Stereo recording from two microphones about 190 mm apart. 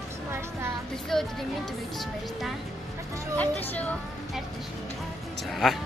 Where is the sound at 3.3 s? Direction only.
10° left (ahead or behind).